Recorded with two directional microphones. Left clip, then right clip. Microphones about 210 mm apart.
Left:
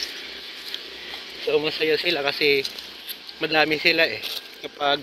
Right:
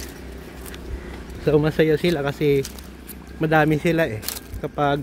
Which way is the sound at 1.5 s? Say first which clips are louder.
Right 3 dB; 20° right (ahead or behind).